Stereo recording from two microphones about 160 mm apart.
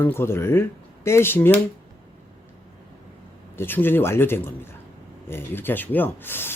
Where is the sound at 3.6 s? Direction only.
15° left (ahead or behind).